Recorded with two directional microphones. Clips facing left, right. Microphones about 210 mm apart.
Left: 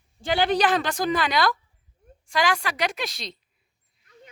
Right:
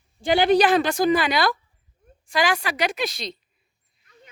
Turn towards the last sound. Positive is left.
turn(degrees=0)  # may be behind; listen again after turning